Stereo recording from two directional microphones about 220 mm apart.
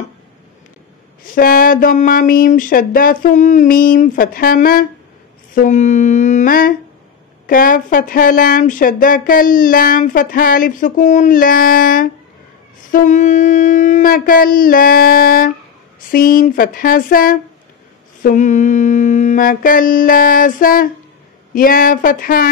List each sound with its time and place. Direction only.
1.2 s speech: 40° left (ahead or behind)